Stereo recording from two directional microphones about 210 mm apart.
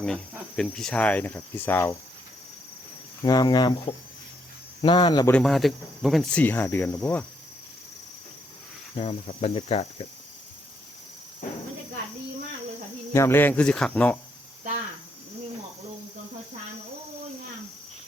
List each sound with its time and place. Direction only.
0.5 s speech: 5° left (ahead or behind)
3.2 s speech: 20° left (ahead or behind)
5.3 s speech: centre (ahead or behind)
9.0 s speech: 30° left (ahead or behind)
13.1 s speech: 10° left (ahead or behind)